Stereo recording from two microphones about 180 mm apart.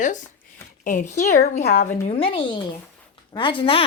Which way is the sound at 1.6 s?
60° left (ahead or behind).